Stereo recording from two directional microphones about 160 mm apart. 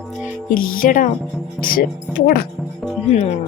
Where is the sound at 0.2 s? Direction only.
65° left (ahead or behind).